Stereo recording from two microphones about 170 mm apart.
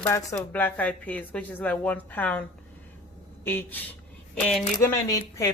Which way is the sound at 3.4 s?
10° left (ahead or behind).